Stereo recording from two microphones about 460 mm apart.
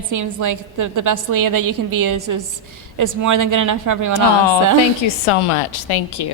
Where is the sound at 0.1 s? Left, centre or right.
Right.